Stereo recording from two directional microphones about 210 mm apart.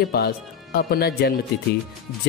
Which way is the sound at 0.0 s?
50° left (ahead or behind).